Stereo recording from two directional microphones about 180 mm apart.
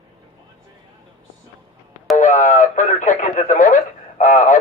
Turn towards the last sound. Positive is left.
turn(degrees=45)  # may be behind; listen again after turning